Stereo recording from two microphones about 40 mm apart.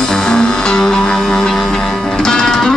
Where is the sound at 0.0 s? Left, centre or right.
Centre.